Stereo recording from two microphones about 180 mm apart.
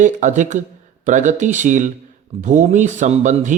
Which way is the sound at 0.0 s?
45° right (ahead or behind).